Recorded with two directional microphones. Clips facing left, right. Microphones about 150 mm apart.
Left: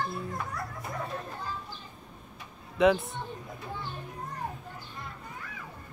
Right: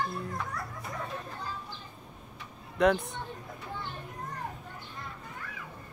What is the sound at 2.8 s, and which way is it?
Speech, centre (ahead or behind).